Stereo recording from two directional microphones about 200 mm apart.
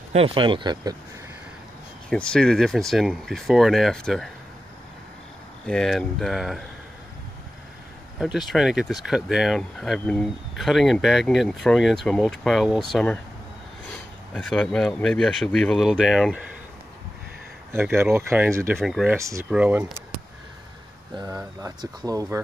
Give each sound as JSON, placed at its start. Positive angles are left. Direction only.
{"t": 0.1, "sound": "speech", "side_deg": -30}
{"t": 2.0, "sound": "speech", "side_deg": 5}
{"t": 5.7, "sound": "speech", "side_deg": 0}
{"t": 8.2, "sound": "speech", "side_deg": 0}
{"t": 14.3, "sound": "speech", "side_deg": 0}
{"t": 17.7, "sound": "speech", "side_deg": -10}
{"t": 18.8, "sound": "speech", "side_deg": 0}
{"t": 19.1, "sound": "speech", "side_deg": -15}
{"t": 21.1, "sound": "speech", "side_deg": -20}